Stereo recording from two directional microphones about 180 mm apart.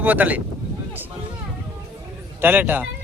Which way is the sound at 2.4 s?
10° right (ahead or behind).